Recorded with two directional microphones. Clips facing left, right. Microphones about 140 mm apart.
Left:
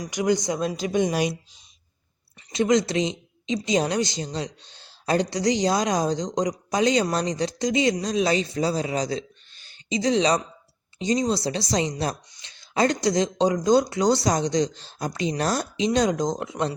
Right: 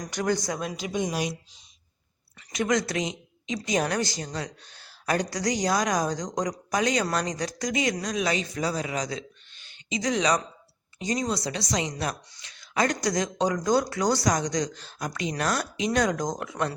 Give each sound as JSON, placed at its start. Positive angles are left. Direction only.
{"t": 0.0, "sound": "a man's voice", "side_deg": 15}
{"t": 0.9, "sound": "a woman's voice", "side_deg": 65}
{"t": 2.5, "sound": "a man's voice", "side_deg": 25}